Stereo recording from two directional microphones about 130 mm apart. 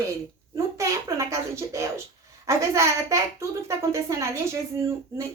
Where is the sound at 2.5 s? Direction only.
20° right (ahead or behind).